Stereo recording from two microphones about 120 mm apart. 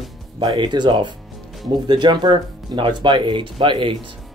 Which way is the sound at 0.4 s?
40° right (ahead or behind).